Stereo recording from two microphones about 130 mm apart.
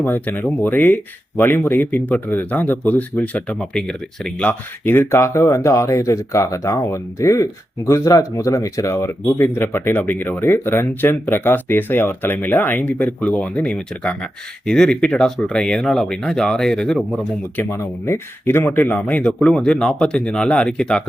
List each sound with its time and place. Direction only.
0.0 s speech: 15° left (ahead or behind)
17.6 s speech: 20° left (ahead or behind)